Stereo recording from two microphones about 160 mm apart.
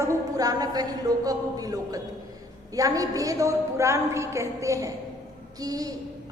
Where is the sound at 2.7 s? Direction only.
20° right (ahead or behind).